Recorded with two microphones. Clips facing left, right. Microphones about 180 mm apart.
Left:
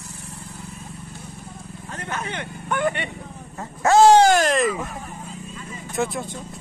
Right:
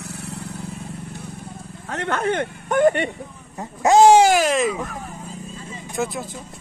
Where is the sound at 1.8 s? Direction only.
70° right (ahead or behind); by 3.0 s 45° right (ahead or behind).